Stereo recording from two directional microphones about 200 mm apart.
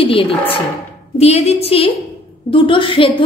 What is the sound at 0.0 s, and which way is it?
A woman's voice, 30° left (ahead or behind).